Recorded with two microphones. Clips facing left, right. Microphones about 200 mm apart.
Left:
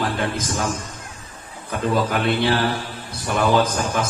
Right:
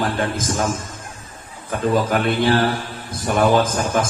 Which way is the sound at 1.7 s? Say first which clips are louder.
Right 2 dB; 45° right (ahead or behind).